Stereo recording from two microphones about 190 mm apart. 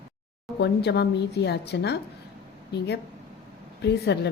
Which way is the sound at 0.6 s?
60° left (ahead or behind).